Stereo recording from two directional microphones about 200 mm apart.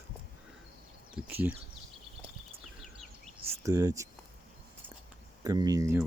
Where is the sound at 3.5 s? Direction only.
15° right (ahead or behind).